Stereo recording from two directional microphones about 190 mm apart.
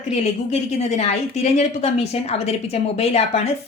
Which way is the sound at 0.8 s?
35° left (ahead or behind).